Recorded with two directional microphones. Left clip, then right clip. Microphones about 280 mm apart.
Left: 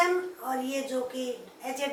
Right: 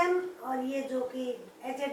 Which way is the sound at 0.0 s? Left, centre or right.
Centre.